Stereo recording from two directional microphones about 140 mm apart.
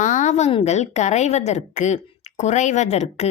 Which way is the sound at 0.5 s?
50° left (ahead or behind).